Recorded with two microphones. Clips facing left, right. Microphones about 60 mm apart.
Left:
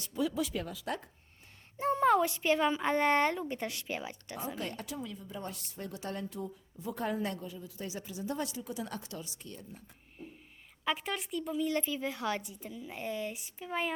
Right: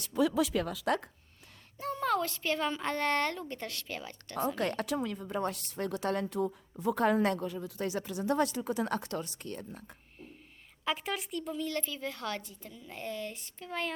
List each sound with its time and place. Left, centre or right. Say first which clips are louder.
0.0 s speech: right 5 dB; right
1.8 s speech: left 5 dB; left
4.5 s a woman's voice: right 7 dB; right
10.2 s a sound: left 3 dB; centre
10.8 s speech: even; centre
11.6 s speech: left 3 dB; centre